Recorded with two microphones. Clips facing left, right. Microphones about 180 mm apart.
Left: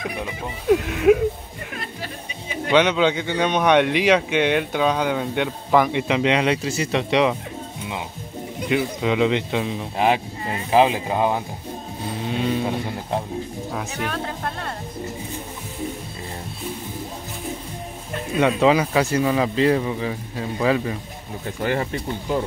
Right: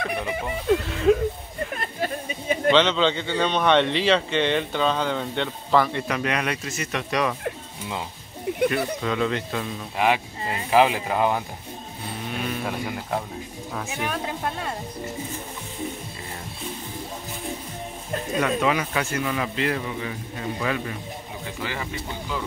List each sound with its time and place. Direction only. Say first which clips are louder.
0.7 s speech: left 4 dB; 10° left (ahead or behind)
1.8 s a sound: right 3 dB; 50° right (ahead or behind)
2.7 s speech: left 3 dB; 10° left (ahead or behind)
8.6 s speech: left 3 dB; 15° left (ahead or behind)
9.9 s speech: left 2 dB; 35° left (ahead or behind)
10.7 s speech: left 2 dB; 20° left (ahead or behind)
13.9 s speech: left 1 dB; 10° right (ahead or behind)
18.4 s speech: left 7 dB; 30° left (ahead or behind)
21.5 s speech: left 9 dB; 45° left (ahead or behind)